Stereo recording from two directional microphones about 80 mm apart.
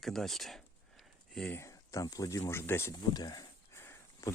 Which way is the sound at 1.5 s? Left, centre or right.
Left.